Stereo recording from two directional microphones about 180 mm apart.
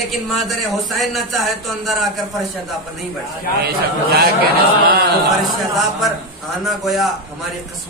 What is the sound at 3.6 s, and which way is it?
Speech, 60° right (ahead or behind).